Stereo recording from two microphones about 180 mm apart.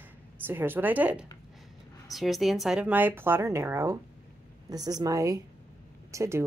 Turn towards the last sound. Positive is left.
turn(degrees=-15)  # may be behind; listen again after turning